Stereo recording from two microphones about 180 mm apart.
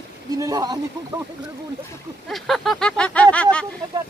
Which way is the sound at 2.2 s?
Centre (ahead or behind).